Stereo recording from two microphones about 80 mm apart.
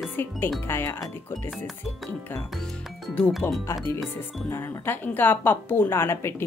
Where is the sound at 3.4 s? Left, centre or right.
Left.